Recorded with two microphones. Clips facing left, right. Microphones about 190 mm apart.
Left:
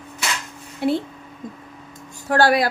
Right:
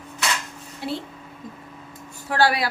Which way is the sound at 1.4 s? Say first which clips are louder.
Left 5 dB; 45° left (ahead or behind).